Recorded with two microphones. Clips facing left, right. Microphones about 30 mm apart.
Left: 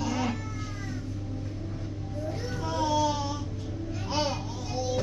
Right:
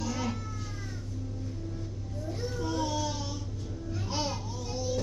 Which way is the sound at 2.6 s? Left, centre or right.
Centre.